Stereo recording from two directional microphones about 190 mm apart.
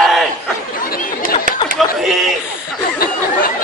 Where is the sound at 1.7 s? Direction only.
Centre (ahead or behind).